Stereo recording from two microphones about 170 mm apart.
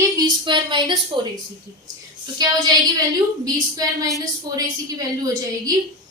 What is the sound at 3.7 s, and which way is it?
Speech, 20° right (ahead or behind).